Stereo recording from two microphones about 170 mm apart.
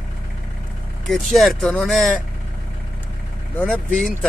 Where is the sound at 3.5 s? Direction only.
5° left (ahead or behind).